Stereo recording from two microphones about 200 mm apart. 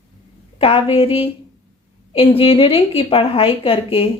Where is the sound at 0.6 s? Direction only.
25° left (ahead or behind).